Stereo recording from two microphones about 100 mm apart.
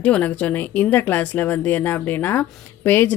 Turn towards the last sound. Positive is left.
turn(degrees=20)  # may be behind; listen again after turning